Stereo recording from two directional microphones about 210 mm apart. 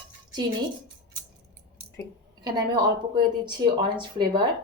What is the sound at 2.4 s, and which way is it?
Speech, 20° right (ahead or behind).